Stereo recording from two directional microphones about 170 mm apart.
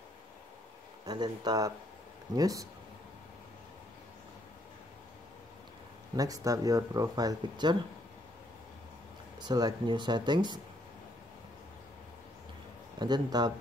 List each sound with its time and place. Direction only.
1.0 s speech: 25° right (ahead or behind)
6.1 s speech: 20° right (ahead or behind)
9.4 s speech: 25° right (ahead or behind)
13.0 s speech: 25° right (ahead or behind)